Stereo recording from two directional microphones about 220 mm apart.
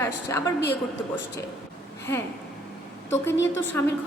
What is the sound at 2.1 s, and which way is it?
Speech, 10° left (ahead or behind).